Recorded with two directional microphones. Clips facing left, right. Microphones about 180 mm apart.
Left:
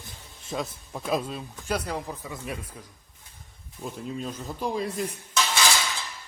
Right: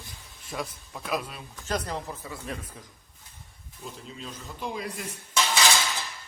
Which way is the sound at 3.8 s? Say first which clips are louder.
Left 5 dB; 55° left (ahead or behind).